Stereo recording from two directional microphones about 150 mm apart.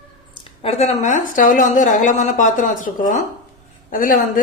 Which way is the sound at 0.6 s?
50° left (ahead or behind).